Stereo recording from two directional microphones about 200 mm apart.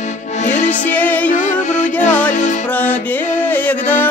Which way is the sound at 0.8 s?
10° left (ahead or behind).